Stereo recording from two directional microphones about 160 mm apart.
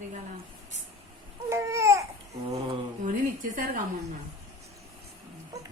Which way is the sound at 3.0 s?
60° right (ahead or behind).